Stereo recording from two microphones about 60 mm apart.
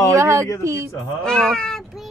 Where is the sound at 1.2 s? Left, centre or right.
Centre.